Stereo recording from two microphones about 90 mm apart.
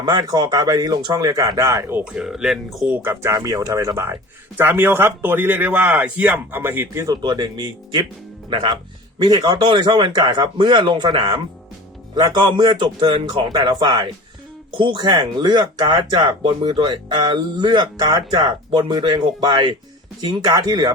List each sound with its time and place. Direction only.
0.0 s speech: 50° right (ahead or behind)
2.1 s speech: 5° right (ahead or behind)
2.9 s speech: 30° right (ahead or behind)
7.0 s a man's voice: 45° right (ahead or behind)
9.6 s speech: 60° right (ahead or behind)
10.2 s speech: 45° right (ahead or behind)
10.6 s speech: 55° right (ahead or behind)
18.3 s speech: 60° right (ahead or behind); by 20.9 s 45° right (ahead or behind)